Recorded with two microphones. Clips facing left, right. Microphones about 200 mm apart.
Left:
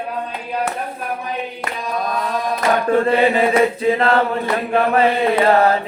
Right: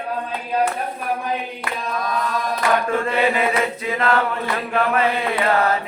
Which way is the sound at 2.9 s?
35° left (ahead or behind).